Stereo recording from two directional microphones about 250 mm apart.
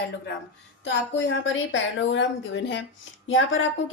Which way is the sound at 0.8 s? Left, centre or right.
Left.